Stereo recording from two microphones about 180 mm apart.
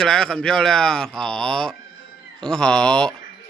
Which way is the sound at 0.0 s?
5° left (ahead or behind).